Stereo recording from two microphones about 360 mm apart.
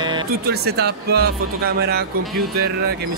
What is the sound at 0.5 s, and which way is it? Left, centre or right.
Speech, right.